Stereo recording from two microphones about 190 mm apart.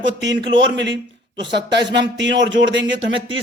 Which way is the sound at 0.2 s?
70° right (ahead or behind).